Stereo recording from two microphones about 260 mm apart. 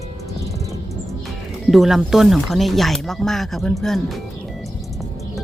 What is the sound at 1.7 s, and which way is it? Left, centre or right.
Speech, centre.